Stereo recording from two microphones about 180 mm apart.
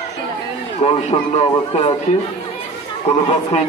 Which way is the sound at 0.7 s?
35° left (ahead or behind).